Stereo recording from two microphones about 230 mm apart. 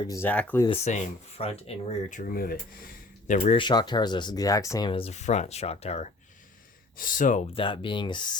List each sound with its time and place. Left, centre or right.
0.1 s speech: centre
0.7 s speech: left
3.6 s speech: centre